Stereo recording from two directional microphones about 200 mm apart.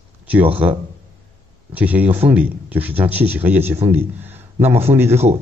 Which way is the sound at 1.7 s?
5° right (ahead or behind).